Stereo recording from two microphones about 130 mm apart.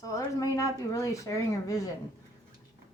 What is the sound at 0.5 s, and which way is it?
Speech, 25° left (ahead or behind).